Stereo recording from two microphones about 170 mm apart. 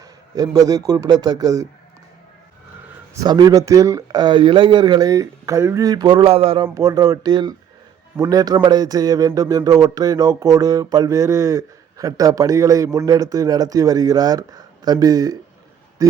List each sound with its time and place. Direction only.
0.0 s a man's voice: 20° right (ahead or behind)
3.2 s speech: 25° right (ahead or behind)
6.7 s speech: 20° right (ahead or behind)